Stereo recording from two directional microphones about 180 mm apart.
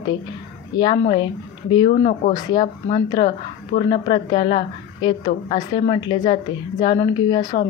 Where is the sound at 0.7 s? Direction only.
25° left (ahead or behind).